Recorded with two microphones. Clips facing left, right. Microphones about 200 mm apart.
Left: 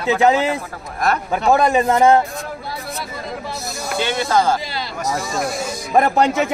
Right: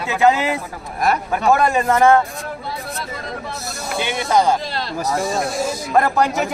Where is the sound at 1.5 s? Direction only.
20° left (ahead or behind).